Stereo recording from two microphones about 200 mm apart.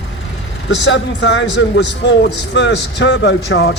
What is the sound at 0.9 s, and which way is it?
A man's voice, 60° left (ahead or behind).